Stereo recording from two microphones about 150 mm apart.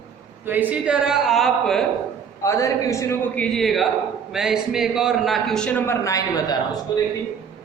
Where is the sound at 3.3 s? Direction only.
5° left (ahead or behind); by 6.6 s 25° left (ahead or behind).